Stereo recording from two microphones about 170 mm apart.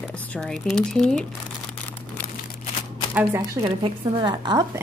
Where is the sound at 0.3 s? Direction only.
5° left (ahead or behind).